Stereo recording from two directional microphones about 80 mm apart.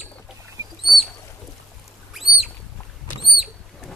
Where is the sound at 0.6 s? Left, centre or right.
Right.